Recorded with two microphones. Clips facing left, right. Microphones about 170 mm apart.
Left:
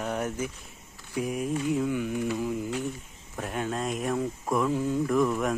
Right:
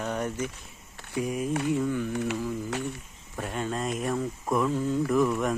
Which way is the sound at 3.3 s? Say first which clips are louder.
Even; centre (ahead or behind).